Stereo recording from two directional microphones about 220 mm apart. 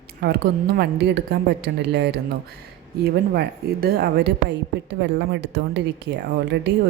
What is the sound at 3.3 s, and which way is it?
A woman's voice, 45° right (ahead or behind).